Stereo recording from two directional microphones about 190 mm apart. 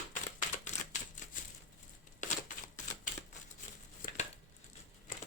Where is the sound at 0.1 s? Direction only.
40° left (ahead or behind).